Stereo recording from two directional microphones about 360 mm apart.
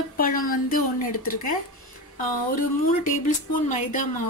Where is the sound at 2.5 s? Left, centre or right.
Left.